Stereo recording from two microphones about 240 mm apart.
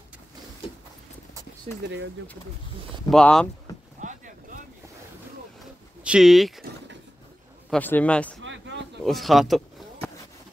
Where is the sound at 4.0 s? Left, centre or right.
Right.